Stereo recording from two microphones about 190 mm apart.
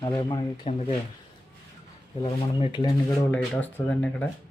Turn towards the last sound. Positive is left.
turn(degrees=10)  # may be behind; listen again after turning